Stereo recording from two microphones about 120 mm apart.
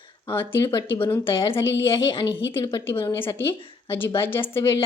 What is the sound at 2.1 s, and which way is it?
Speech, 45° left (ahead or behind).